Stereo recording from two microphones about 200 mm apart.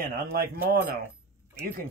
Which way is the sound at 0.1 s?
50° right (ahead or behind).